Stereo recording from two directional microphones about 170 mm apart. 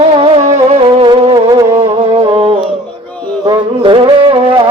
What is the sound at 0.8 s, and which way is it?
Music, 30° right (ahead or behind).